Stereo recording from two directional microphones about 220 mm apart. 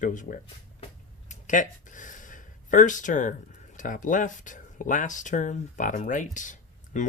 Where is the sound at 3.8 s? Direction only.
35° left (ahead or behind).